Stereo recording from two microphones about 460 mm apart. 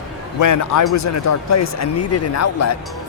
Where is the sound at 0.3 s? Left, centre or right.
Left.